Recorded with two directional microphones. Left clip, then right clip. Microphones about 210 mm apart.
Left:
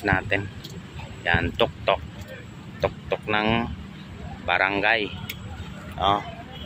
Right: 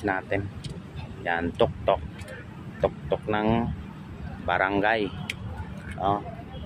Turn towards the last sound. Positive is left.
turn(degrees=-10)  # may be behind; listen again after turning